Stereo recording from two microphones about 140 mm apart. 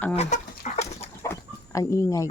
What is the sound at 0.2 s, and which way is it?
Chicken, 55° left (ahead or behind).